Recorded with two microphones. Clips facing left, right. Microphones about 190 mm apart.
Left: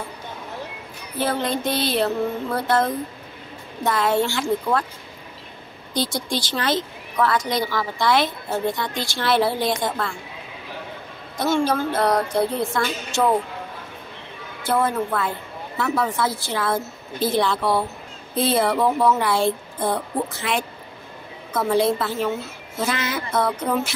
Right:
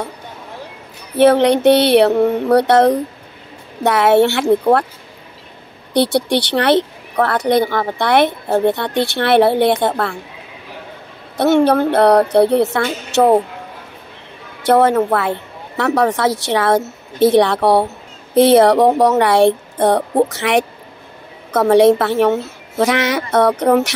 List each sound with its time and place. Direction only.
1.1 s a woman's voice: 70° right (ahead or behind)
5.9 s a woman's voice: 65° right (ahead or behind)
11.3 s a woman's voice: 65° right (ahead or behind)
14.6 s a woman's voice: 75° right (ahead or behind)